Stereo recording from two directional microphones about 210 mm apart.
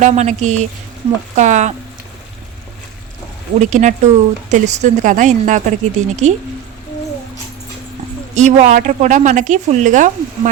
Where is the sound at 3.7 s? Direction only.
35° right (ahead or behind).